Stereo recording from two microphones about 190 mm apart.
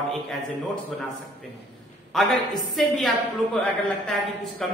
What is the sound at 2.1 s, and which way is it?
A man's voice, centre (ahead or behind).